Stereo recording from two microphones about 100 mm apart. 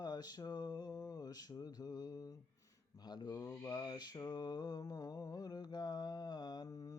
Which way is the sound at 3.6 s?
45° left (ahead or behind).